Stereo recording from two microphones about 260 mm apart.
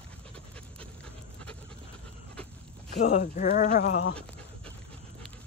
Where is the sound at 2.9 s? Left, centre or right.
Left.